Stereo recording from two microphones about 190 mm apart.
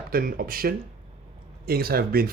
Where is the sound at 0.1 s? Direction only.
50° right (ahead or behind).